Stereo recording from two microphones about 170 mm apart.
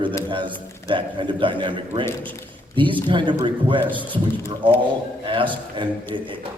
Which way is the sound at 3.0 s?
30° right (ahead or behind).